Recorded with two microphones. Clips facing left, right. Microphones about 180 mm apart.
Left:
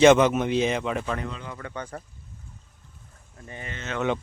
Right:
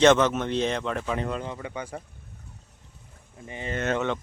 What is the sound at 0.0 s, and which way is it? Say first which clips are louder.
Speech: left 3 dB; 10° left (ahead or behind).